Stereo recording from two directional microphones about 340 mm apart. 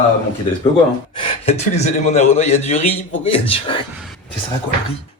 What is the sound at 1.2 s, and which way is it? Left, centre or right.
A man's voice, centre.